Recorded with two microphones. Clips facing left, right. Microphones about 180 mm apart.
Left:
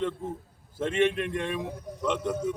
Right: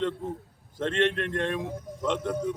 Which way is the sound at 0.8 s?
10° left (ahead or behind).